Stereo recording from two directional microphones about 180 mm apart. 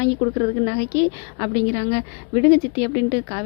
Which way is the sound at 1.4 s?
30° left (ahead or behind).